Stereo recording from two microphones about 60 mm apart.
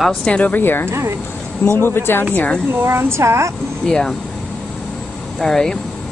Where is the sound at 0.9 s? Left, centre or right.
Right.